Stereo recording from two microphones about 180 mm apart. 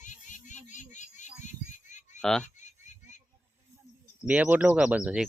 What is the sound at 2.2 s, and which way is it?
Speech, 5° left (ahead or behind).